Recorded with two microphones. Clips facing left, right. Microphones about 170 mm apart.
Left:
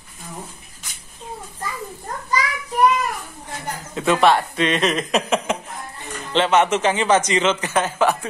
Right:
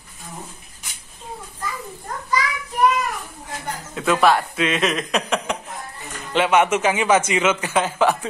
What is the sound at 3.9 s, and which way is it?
Speech, centre (ahead or behind).